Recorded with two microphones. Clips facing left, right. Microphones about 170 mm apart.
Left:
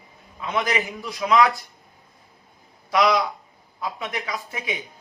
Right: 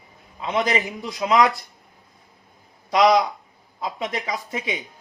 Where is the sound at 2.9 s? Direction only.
20° right (ahead or behind).